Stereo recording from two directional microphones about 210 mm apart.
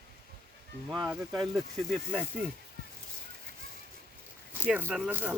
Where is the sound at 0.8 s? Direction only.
15° right (ahead or behind).